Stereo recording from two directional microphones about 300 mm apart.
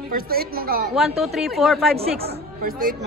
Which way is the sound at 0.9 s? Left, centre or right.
Centre.